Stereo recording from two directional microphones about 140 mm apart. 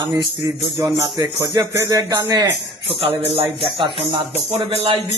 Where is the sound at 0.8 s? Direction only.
25° right (ahead or behind).